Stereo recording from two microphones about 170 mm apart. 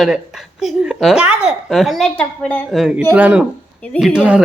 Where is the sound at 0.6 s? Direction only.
Centre (ahead or behind).